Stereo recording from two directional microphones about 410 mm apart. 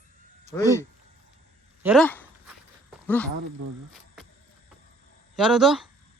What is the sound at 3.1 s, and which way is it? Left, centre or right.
Speech, centre.